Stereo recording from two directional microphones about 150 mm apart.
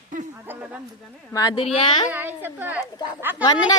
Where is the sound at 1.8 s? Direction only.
30° left (ahead or behind).